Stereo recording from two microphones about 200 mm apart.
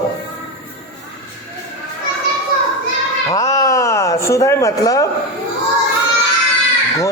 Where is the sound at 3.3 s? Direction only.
20° left (ahead or behind).